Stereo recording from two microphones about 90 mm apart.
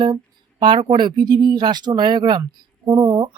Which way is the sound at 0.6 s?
65° right (ahead or behind).